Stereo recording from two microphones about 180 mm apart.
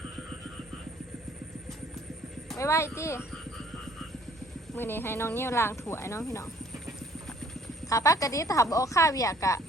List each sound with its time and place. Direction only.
2.6 s speech: 15° left (ahead or behind)
4.7 s speech: 10° left (ahead or behind)
7.9 s speech: 20° left (ahead or behind)